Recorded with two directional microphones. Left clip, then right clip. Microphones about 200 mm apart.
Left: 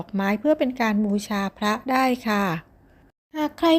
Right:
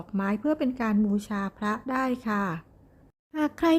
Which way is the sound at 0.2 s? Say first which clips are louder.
Left 6 dB; 5° left (ahead or behind).